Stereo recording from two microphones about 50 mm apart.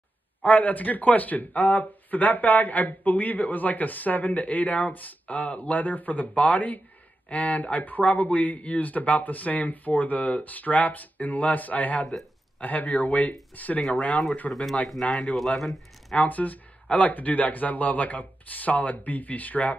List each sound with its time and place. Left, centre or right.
0.4 s speech: left
14.5 s speech: centre
16.2 s speech: left